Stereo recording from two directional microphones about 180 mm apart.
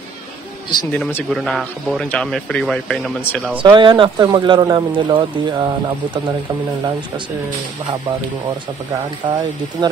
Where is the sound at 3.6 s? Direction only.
25° right (ahead or behind).